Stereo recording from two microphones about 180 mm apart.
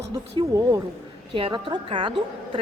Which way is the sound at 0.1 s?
20° right (ahead or behind).